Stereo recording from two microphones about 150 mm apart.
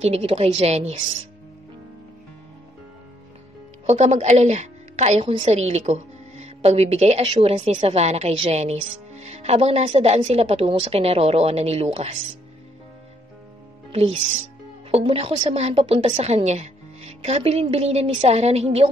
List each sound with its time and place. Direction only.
0.0 s speech: 40° right (ahead or behind)
3.8 s a woman's voice: 50° right (ahead or behind)
14.9 s speech: 40° right (ahead or behind)